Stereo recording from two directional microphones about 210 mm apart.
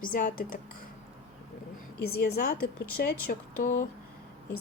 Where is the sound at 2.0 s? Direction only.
50° left (ahead or behind).